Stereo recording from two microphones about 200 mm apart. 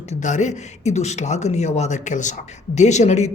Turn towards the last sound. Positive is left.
turn(degrees=35)  # may be behind; listen again after turning